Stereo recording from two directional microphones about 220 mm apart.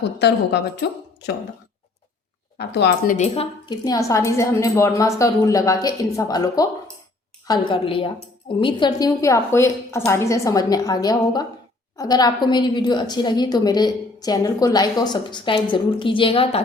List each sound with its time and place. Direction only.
0.2 s speech: 50° left (ahead or behind)
2.6 s speech: 50° left (ahead or behind)
3.2 s a woman's voice: 25° left (ahead or behind)